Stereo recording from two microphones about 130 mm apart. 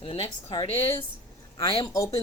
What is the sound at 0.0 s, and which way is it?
Speech, 50° left (ahead or behind).